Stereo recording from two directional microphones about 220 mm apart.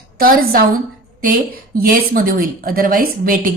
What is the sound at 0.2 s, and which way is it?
A woman's voice, 40° right (ahead or behind).